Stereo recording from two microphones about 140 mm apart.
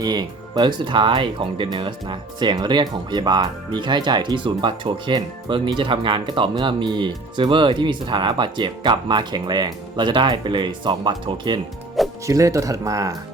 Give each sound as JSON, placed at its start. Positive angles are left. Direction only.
{"t": 0.0, "sound": "speech", "side_deg": -30}